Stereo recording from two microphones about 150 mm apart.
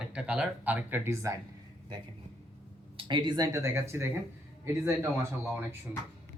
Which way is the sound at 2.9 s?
30° right (ahead or behind).